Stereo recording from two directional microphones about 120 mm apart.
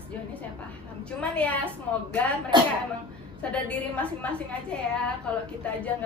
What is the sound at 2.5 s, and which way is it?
Speech, 40° right (ahead or behind).